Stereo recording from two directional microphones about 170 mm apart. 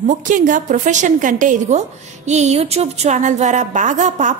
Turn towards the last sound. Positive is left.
turn(degrees=-45)  # may be behind; listen again after turning